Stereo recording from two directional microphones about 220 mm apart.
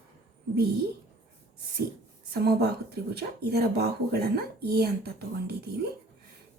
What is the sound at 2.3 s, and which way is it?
Speech, 45° right (ahead or behind).